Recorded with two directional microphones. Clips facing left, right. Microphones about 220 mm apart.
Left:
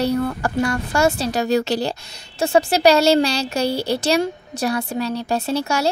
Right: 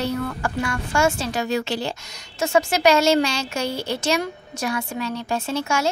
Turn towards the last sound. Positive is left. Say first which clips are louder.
# left 3 dB
turn(degrees=35)  # may be behind; listen again after turning